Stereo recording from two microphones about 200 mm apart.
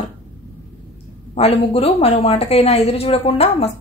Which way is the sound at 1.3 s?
30° left (ahead or behind).